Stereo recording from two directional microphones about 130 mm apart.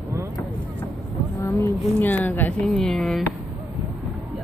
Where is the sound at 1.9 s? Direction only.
15° left (ahead or behind).